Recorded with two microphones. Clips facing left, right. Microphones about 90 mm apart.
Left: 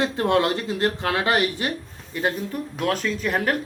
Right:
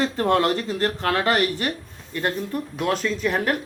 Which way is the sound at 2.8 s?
Centre (ahead or behind).